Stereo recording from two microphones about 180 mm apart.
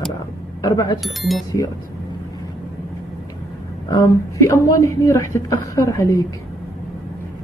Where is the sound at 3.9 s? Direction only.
15° left (ahead or behind).